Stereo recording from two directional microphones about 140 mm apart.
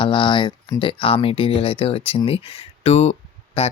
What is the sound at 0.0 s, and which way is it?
Speech, 35° left (ahead or behind).